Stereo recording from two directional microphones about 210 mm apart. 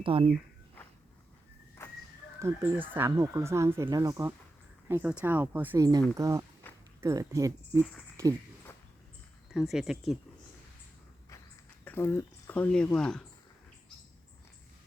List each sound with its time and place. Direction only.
0.0 s speech: 25° right (ahead or behind)
1.8 s a sound: 10° left (ahead or behind)
2.4 s speech: 10° right (ahead or behind)
9.5 s speech: centre (ahead or behind)
11.9 s speech: 10° left (ahead or behind)